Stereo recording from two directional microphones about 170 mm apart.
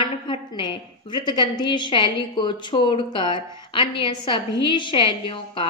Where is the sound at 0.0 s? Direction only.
30° left (ahead or behind).